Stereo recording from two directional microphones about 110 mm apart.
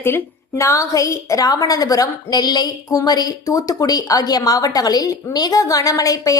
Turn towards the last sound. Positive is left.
turn(degrees=30)  # may be behind; listen again after turning